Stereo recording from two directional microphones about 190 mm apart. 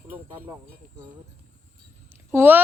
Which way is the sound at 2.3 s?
10° right (ahead or behind).